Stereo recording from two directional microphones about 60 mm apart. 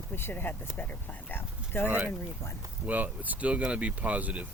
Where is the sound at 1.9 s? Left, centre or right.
Right.